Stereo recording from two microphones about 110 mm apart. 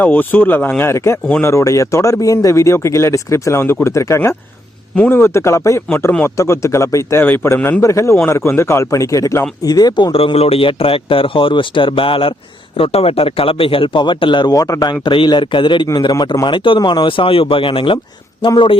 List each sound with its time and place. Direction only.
0.0 s a man's voice: 15° left (ahead or behind); by 18.8 s 45° left (ahead or behind)